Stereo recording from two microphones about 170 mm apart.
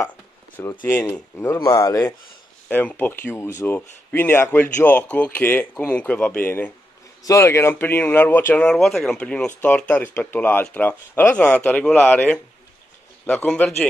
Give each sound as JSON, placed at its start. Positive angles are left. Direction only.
{"t": 0.6, "sound": "speech", "side_deg": 15}